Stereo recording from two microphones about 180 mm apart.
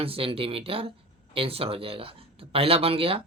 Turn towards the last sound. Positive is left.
turn(degrees=-30)  # may be behind; listen again after turning